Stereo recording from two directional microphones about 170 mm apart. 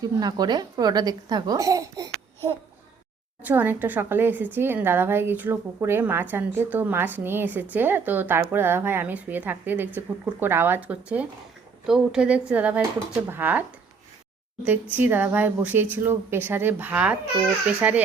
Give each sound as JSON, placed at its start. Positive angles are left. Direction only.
{"t": 0.0, "sound": "a woman's voice", "side_deg": -25}